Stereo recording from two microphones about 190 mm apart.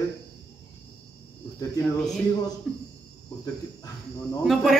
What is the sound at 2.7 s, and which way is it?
Speech, centre (ahead or behind).